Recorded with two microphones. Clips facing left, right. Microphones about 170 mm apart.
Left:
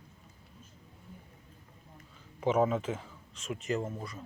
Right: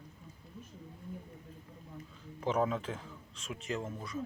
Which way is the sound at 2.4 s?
5° left (ahead or behind).